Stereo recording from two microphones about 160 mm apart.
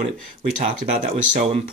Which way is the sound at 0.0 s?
45° right (ahead or behind).